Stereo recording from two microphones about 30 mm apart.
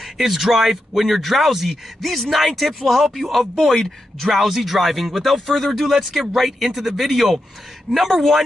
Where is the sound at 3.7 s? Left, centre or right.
Centre.